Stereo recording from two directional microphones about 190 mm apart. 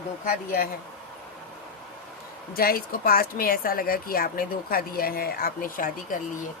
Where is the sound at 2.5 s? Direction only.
50° left (ahead or behind).